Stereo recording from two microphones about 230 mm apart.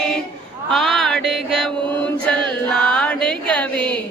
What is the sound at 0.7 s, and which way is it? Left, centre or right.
Music, centre.